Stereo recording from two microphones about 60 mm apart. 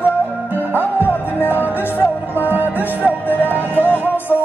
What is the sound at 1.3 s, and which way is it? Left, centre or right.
Music, left.